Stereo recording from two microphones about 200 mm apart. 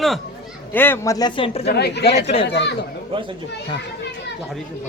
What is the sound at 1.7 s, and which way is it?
A woman's voice, 55° left (ahead or behind).